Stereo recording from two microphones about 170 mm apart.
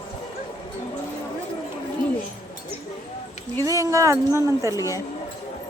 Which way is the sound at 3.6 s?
20° right (ahead or behind).